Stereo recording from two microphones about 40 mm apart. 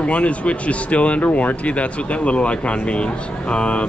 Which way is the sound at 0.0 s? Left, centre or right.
Left.